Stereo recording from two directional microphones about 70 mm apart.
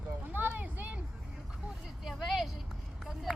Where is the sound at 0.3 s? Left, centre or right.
Right.